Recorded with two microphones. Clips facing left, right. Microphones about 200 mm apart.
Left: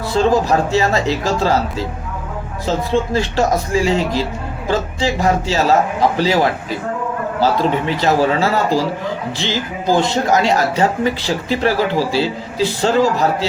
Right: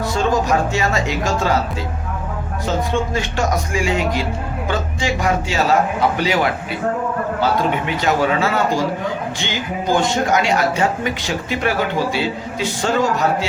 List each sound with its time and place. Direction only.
0.1 s speech: 35° left (ahead or behind)
2.6 s speech: 35° left (ahead or behind)